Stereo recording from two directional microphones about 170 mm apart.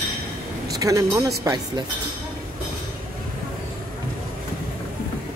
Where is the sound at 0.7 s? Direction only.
20° right (ahead or behind).